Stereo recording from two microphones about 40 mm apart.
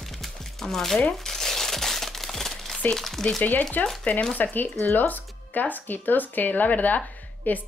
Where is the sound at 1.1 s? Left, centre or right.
Centre.